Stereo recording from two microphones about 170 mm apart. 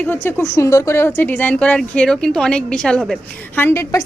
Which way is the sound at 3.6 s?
15° left (ahead or behind).